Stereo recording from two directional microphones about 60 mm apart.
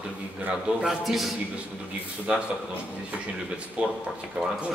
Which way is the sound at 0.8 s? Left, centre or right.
Centre.